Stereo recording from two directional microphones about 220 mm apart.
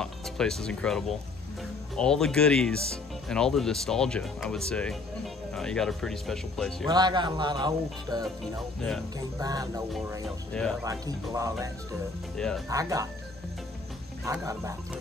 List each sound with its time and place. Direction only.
0.0 s speech: centre (ahead or behind)
6.9 s speech: 20° right (ahead or behind)
9.4 s speech: 15° right (ahead or behind)
10.2 s speech: 5° left (ahead or behind)
10.8 s speech: 15° right (ahead or behind)
12.4 s speech: 5° left (ahead or behind)
12.6 s speech: 15° right (ahead or behind)
14.2 s speech: 15° right (ahead or behind)